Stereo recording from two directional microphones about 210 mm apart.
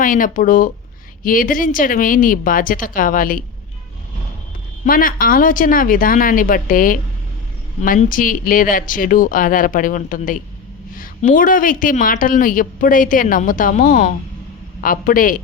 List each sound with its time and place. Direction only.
0.0 s a woman's voice: 40° left (ahead or behind)
4.9 s a woman's voice: 40° left (ahead or behind)